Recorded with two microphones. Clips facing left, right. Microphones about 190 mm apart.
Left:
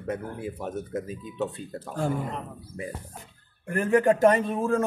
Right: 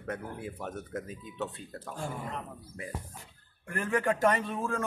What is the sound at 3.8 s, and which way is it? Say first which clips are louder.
Speech: left 8 dB; 40° left (ahead or behind).